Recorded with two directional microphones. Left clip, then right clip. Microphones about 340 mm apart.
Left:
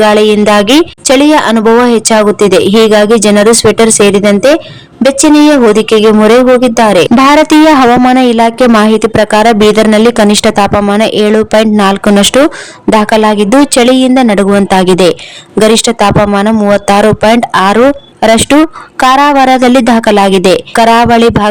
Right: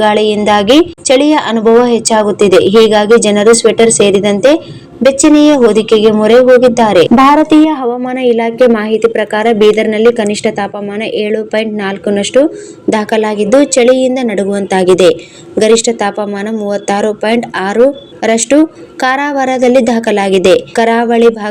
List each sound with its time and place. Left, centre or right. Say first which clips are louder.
0.0 s a woman's voice: left 4 dB; left
5.2 s a woman's voice: left 3 dB; left